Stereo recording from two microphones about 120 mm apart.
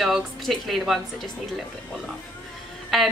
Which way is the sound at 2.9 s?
Centre (ahead or behind).